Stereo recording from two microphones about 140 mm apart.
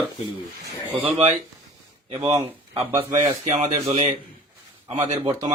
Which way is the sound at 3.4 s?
55° right (ahead or behind).